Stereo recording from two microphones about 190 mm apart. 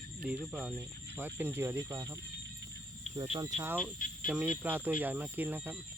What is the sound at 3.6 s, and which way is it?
Speech, 10° right (ahead or behind).